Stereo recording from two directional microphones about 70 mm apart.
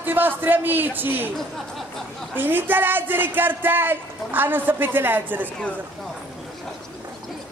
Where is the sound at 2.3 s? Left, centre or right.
Right.